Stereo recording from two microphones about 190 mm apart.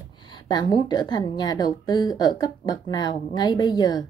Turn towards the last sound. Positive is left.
turn(degrees=20)  # may be behind; listen again after turning